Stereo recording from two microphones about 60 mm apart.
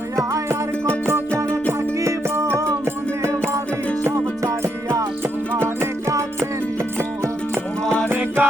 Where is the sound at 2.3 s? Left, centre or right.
Right.